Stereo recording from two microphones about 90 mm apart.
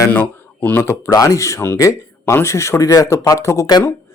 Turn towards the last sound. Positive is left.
turn(degrees=35)  # may be behind; listen again after turning